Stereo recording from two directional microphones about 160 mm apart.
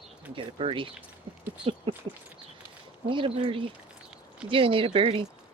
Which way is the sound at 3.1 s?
35° right (ahead or behind).